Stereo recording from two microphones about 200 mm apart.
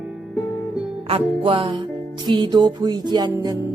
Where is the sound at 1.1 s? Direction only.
25° right (ahead or behind).